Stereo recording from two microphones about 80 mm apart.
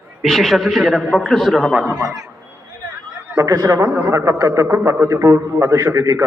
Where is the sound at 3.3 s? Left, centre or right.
Right.